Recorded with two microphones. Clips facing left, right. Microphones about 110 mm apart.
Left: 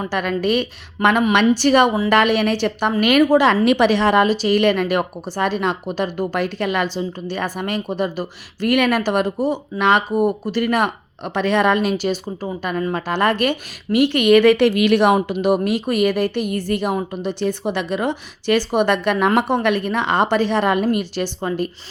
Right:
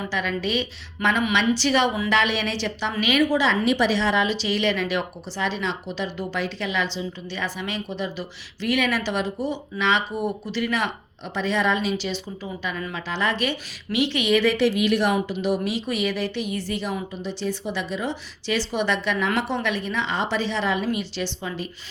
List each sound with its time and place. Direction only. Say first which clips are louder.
0.0 s a woman's voice: left 6 dB; 55° left (ahead or behind)